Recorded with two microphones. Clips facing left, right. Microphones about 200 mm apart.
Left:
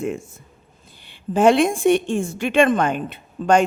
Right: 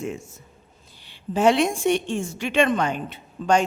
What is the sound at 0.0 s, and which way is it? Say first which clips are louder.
A woman's voice: left 5 dB; 55° left (ahead or behind).